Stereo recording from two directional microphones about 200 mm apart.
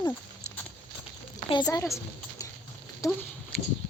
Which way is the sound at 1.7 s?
15° left (ahead or behind).